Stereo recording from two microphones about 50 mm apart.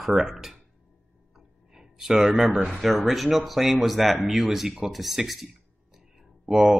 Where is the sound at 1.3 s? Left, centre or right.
Centre.